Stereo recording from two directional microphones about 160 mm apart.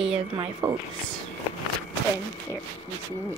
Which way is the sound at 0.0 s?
40° right (ahead or behind).